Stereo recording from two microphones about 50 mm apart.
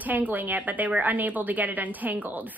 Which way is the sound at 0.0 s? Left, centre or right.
Right.